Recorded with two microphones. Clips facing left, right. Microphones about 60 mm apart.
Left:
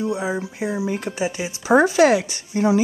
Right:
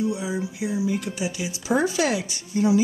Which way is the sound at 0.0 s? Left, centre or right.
Left.